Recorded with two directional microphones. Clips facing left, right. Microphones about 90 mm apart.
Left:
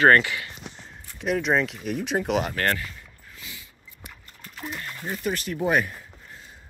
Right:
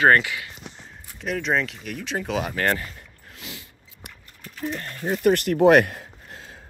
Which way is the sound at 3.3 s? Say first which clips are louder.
Right 4 dB; 65° right (ahead or behind).